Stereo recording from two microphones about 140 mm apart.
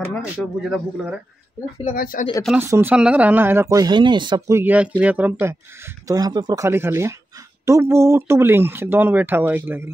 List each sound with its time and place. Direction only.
0.1 s speech: centre (ahead or behind)
1.9 s speech: 80° left
2.5 s speech: 15° right (ahead or behind); by 4.4 s 35° right (ahead or behind)
4.5 s speech: 15° right (ahead or behind)
6.0 s speech: 25° right (ahead or behind)